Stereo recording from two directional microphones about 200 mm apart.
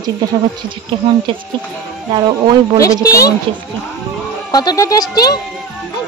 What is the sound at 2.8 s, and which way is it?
Speech, 15° left (ahead or behind).